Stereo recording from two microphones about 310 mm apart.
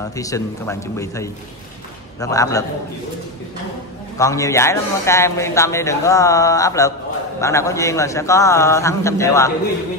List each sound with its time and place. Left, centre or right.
0.1 s speech: centre
4.2 s speech: centre